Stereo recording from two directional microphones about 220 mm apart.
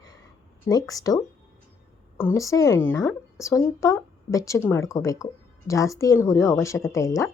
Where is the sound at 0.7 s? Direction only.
15° left (ahead or behind).